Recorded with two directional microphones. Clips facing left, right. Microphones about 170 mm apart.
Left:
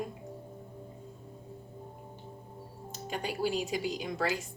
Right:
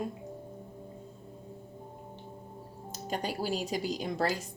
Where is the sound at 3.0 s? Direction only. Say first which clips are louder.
Left 1 dB; 40° right (ahead or behind).